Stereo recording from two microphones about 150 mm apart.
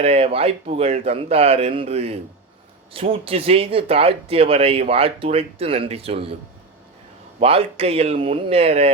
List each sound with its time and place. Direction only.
0.0 s speech: 40° right (ahead or behind)
7.3 s speech: 40° right (ahead or behind)